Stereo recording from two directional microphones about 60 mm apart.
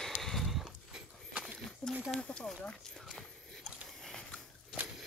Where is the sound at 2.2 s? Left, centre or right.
Centre.